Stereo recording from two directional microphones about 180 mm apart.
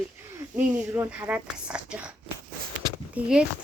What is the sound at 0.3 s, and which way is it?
Speech, 10° right (ahead or behind).